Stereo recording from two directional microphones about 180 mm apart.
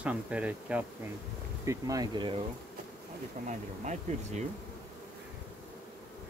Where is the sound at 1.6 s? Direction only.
20° right (ahead or behind).